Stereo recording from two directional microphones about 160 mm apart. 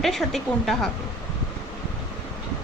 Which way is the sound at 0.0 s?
Centre (ahead or behind).